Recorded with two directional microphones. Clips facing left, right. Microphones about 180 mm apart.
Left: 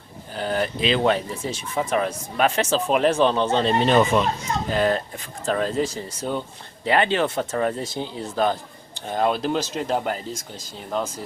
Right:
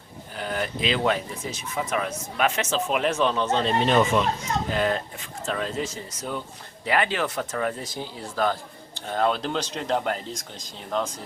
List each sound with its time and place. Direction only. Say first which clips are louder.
0.3 s speech: left 5 dB; 35° left (ahead or behind); by 11.1 s 5° left (ahead or behind)